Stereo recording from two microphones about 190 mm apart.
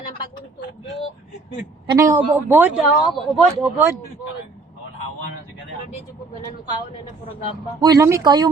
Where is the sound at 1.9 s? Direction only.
15° right (ahead or behind).